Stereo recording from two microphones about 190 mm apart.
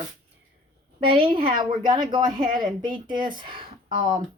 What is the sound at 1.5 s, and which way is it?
Speech, 25° right (ahead or behind).